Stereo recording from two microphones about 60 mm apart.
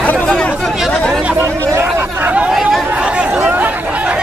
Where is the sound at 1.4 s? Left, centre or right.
Right.